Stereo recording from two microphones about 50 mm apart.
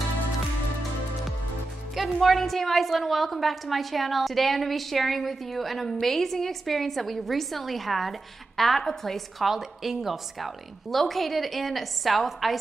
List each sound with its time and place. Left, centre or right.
2.0 s a woman's voice: centre